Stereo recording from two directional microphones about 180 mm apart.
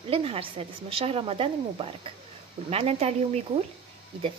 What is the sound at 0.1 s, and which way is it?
A woman's voice, 30° right (ahead or behind).